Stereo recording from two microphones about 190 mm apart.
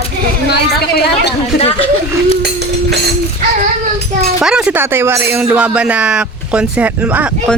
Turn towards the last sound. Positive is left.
turn(degrees=-5)  # may be behind; listen again after turning